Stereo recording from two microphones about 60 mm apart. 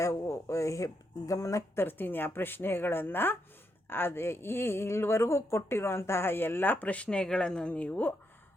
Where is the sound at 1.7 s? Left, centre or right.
Left.